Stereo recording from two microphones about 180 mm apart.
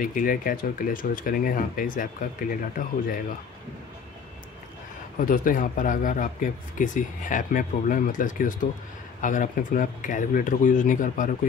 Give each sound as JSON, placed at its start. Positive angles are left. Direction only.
{"t": 0.0, "sound": "speech", "side_deg": 50}
{"t": 5.2, "sound": "speech", "side_deg": 50}